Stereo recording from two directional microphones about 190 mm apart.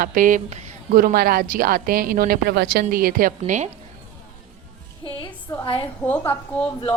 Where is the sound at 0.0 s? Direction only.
45° right (ahead or behind).